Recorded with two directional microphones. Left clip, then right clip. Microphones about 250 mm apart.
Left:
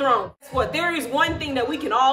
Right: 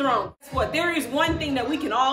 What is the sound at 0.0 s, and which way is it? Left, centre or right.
Speech, centre.